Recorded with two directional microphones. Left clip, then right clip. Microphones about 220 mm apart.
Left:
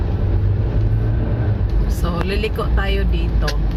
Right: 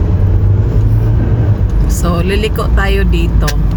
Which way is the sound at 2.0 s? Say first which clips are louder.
Right 7 dB; 25° right (ahead or behind).